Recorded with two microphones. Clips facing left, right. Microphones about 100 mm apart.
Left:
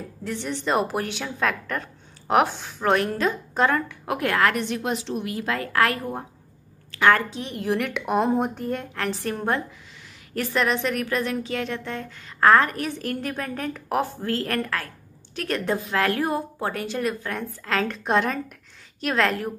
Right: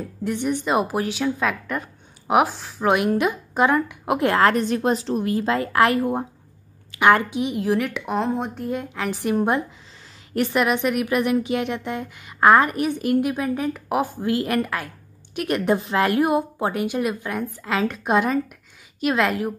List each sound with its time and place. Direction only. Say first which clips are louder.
0.2 s a woman's voice: right 6 dB; 15° right (ahead or behind)
7.5 s a woman's voice: even; centre (ahead or behind)
9.1 s a woman's voice: right 6 dB; 15° right (ahead or behind)